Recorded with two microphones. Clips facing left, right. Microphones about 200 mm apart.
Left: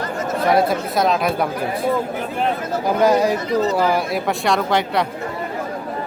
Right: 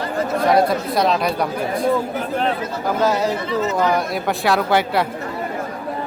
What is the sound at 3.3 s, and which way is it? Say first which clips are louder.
Speech: left 2 dB; 40° left (ahead or behind).